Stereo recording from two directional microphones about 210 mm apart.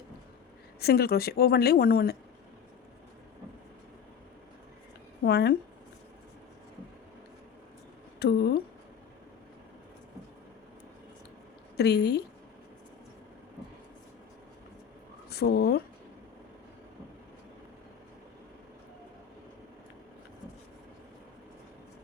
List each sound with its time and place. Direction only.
0.8 s a woman's voice: 50° left (ahead or behind)
5.2 s a woman's voice: 50° left (ahead or behind)
8.2 s a woman's voice: 50° left (ahead or behind)
11.8 s a woman's voice: 50° left (ahead or behind)
15.3 s speech: 50° left (ahead or behind)